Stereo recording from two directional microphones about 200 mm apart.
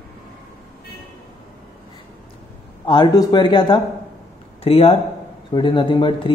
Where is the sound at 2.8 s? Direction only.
25° left (ahead or behind).